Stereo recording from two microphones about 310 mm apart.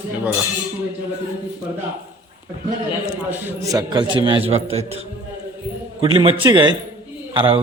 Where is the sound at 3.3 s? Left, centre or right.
Centre.